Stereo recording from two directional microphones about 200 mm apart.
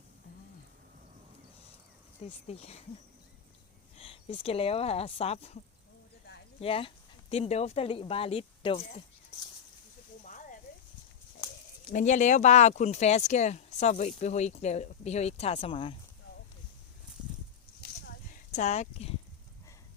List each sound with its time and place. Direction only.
2.2 s speech: 30° left (ahead or behind)
3.9 s speech: 30° left (ahead or behind)
6.6 s speech: 30° left (ahead or behind)
10.2 s a sound: 40° left (ahead or behind)
11.9 s speech: 40° left (ahead or behind)
17.7 s horse: 45° left (ahead or behind)